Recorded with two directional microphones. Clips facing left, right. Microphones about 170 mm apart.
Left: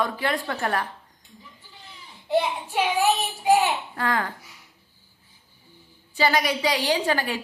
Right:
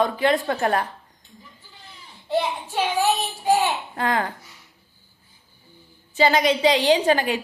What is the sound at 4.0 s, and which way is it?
Speech, 20° right (ahead or behind).